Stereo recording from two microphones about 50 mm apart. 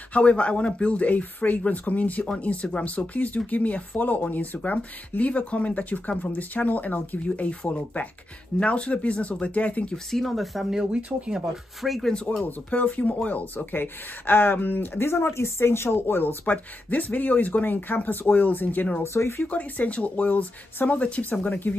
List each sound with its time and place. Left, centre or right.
0.1 s speech: left
8.5 s speech: left
10.1 s speech: centre
10.9 s speech: right
11.8 s speech: centre
12.4 s speech: left
16.2 s speech: left
19.1 s speech: left
19.4 s speech: left